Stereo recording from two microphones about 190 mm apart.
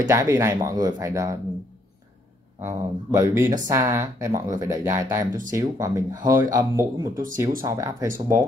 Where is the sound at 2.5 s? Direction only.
15° right (ahead or behind).